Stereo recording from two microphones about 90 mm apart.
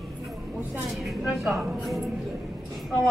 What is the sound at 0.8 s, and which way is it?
A woman's voice, centre (ahead or behind).